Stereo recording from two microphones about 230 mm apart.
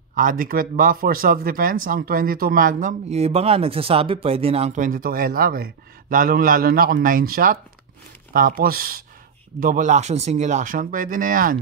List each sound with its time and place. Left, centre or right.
0.1 s speech: right